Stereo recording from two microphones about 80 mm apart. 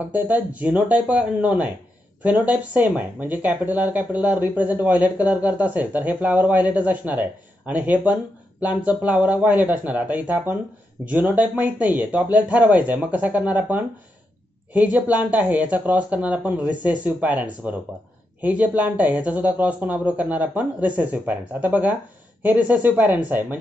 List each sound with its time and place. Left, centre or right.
0.0 s speech: right